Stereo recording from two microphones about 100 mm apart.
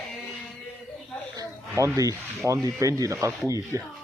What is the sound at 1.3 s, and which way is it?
Speech, 35° right (ahead or behind).